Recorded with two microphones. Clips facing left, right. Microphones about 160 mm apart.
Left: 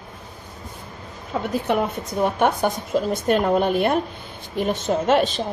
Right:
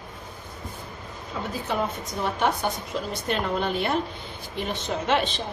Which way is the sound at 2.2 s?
50° left (ahead or behind).